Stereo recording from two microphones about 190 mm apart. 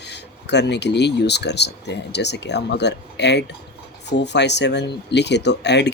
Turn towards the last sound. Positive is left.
turn(degrees=65)  # may be behind; listen again after turning